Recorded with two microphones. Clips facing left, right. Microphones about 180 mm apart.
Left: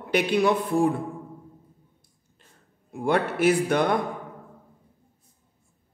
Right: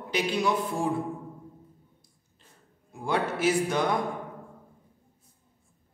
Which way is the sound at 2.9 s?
55° left (ahead or behind).